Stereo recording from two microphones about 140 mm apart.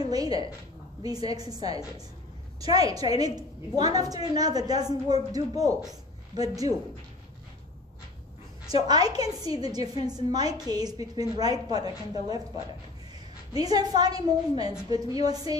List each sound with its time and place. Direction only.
0.1 s a sound: 25° right (ahead or behind)
1.0 s a woman's voice: 25° right (ahead or behind)
8.8 s a woman's voice: 30° right (ahead or behind)